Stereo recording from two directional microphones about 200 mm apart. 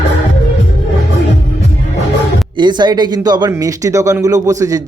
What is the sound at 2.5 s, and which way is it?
Speech, 20° right (ahead or behind).